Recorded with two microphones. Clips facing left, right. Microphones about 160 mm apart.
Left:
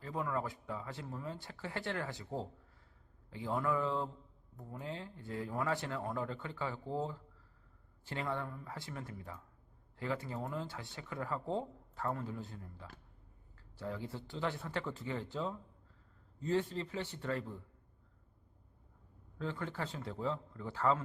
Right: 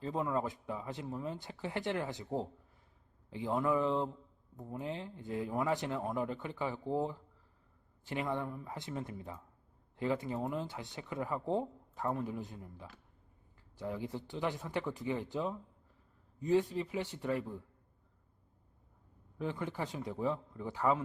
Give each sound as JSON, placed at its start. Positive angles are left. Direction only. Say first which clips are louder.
{"t": 0.0, "sound": "speech", "louder": "right 3 dB", "side_deg": -25}
{"t": 19.4, "sound": "speech", "louder": "right 2 dB", "side_deg": -15}